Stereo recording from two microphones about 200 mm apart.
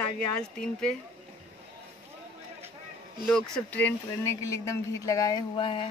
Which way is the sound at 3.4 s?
5° left (ahead or behind).